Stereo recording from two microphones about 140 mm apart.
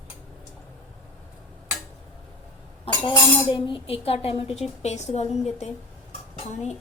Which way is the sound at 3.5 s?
40° left (ahead or behind).